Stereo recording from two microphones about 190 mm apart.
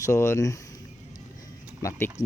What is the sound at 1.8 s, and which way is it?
Speech, 15° left (ahead or behind).